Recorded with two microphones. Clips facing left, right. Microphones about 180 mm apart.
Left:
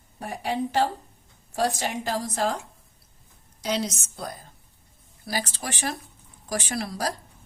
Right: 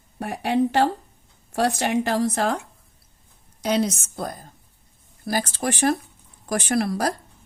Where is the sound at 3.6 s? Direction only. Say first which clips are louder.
Right 6 dB; 55° right (ahead or behind).